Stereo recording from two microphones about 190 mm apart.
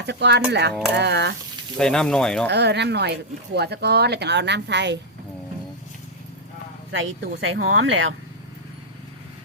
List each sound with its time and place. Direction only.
0.0 s speech: 65° right (ahead or behind)
1.8 s speech: 5° left (ahead or behind)
2.5 s speech: 65° right (ahead or behind)
6.9 s speech: 80° right